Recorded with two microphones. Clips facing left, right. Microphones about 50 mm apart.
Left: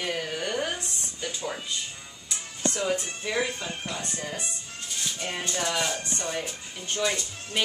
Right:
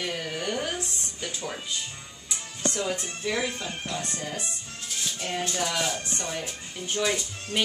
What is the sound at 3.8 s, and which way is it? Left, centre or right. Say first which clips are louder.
Speech: right 1 dB; centre.